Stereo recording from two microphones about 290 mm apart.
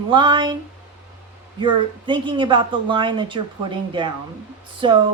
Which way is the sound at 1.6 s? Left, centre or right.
Centre.